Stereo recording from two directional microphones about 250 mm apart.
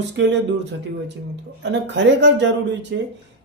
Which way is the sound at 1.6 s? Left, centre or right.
Right.